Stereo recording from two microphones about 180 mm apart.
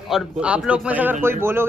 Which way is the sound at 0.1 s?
5° right (ahead or behind).